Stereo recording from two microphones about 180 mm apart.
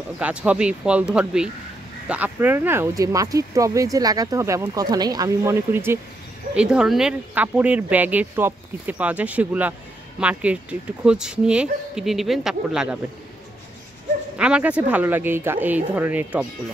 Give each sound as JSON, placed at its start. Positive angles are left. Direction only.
{"t": 0.2, "sound": "speech", "side_deg": -5}
{"t": 14.3, "sound": "speech", "side_deg": -5}